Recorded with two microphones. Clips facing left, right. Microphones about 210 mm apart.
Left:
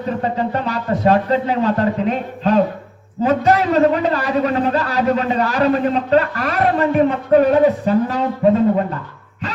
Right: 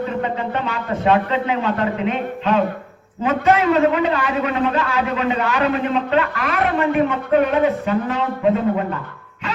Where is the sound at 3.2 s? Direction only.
35° left (ahead or behind).